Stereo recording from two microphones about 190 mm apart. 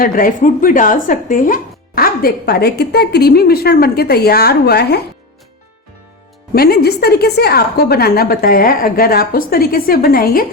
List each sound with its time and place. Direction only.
0.0 s speech: 50° left (ahead or behind)
6.5 s speech: 55° left (ahead or behind)